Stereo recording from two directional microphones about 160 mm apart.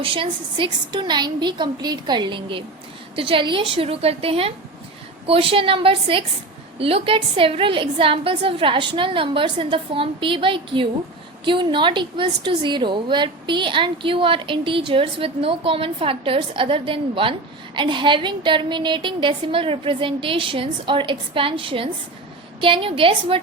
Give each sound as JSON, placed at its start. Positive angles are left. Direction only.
{"t": 0.0, "sound": "a woman's voice", "side_deg": -35}